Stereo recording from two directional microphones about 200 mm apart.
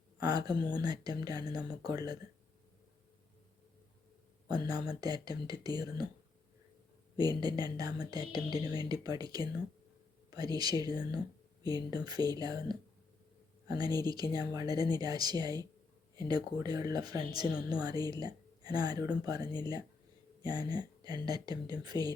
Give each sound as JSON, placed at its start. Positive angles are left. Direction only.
{"t": 0.2, "sound": "a woman's voice", "side_deg": -20}
{"t": 4.4, "sound": "a woman's voice", "side_deg": -20}
{"t": 7.2, "sound": "a woman's voice", "side_deg": -20}
{"t": 13.7, "sound": "a woman's voice", "side_deg": -20}